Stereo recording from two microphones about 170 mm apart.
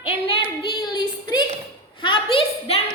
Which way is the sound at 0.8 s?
25° left (ahead or behind).